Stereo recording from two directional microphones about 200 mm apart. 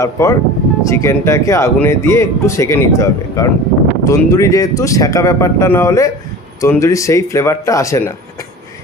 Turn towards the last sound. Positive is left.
turn(degrees=15)  # may be behind; listen again after turning